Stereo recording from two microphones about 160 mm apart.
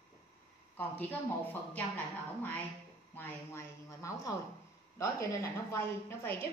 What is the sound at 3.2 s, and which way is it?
A woman's voice, 15° left (ahead or behind).